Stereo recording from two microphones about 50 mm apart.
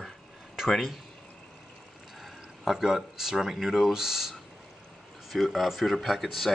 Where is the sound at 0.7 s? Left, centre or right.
Centre.